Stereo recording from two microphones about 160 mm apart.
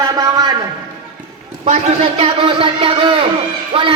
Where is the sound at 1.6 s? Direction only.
40° right (ahead or behind).